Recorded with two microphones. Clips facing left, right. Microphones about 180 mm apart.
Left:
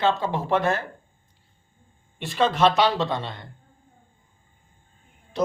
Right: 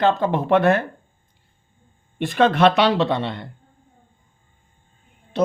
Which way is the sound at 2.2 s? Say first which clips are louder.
Right 4 dB; 55° right (ahead or behind).